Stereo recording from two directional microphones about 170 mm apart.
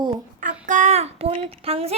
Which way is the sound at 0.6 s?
45° right (ahead or behind).